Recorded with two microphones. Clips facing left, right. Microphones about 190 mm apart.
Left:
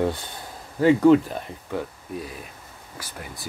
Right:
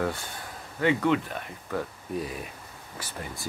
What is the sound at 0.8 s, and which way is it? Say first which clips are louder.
Speech: left 8 dB; 35° left (ahead or behind).